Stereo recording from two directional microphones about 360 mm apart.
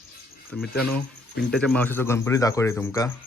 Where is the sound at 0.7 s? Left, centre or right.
Left.